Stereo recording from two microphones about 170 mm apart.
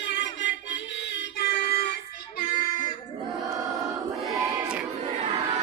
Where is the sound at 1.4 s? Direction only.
70° left (ahead or behind).